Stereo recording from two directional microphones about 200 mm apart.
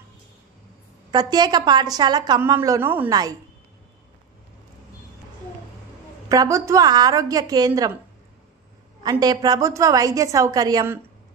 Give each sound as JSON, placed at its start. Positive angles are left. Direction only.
{"t": 1.1, "sound": "a woman's voice", "side_deg": -20}
{"t": 6.2, "sound": "a woman's voice", "side_deg": -15}
{"t": 9.0, "sound": "a woman's voice", "side_deg": -20}